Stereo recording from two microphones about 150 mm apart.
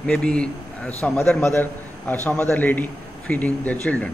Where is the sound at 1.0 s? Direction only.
5° left (ahead or behind).